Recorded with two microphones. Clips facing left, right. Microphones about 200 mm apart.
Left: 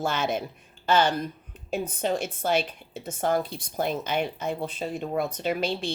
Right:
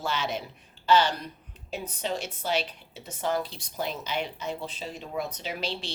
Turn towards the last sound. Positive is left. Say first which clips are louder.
# left 7 dB
turn(degrees=50)  # may be behind; listen again after turning